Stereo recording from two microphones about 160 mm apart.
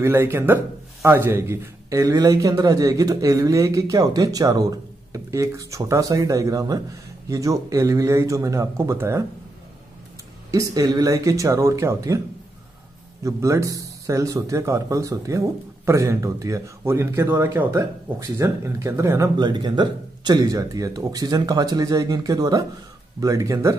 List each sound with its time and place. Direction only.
0.0 s speech: 15° right (ahead or behind)
10.5 s speech: 20° right (ahead or behind)
13.2 s speech: 20° right (ahead or behind)